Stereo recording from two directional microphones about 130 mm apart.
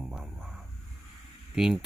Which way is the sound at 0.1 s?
5° right (ahead or behind).